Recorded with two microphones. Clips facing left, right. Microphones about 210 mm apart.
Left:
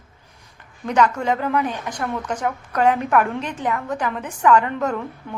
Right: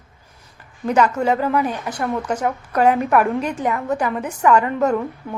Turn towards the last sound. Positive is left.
turn(degrees=-10)  # may be behind; listen again after turning